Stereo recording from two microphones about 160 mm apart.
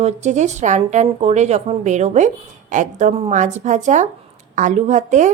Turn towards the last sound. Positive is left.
turn(degrees=-50)  # may be behind; listen again after turning